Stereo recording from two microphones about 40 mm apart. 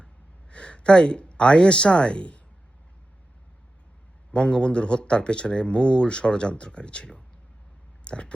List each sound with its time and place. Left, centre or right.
0.5 s speech: left
4.3 s speech: left
8.0 s a sound: left